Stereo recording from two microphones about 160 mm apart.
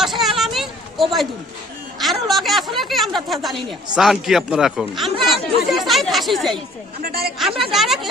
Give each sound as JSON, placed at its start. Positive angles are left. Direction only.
{"t": 0.0, "sound": "hubbub", "side_deg": 0}
{"t": 2.0, "sound": "speech", "side_deg": 0}
{"t": 7.0, "sound": "a woman's voice", "side_deg": -75}
{"t": 7.3, "sound": "speech", "side_deg": 0}